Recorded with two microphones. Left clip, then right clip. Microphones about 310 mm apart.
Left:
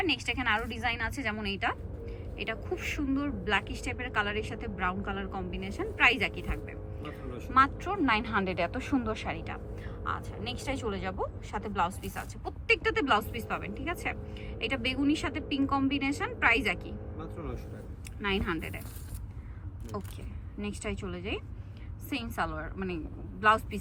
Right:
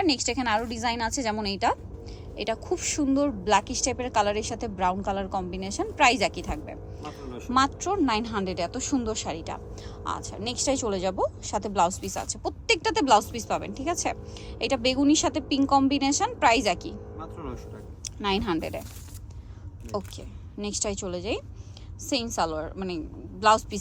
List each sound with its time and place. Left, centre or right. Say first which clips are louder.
0.0 s a woman's voice: right 4 dB; centre
19.9 s a woman's voice: right 8 dB; centre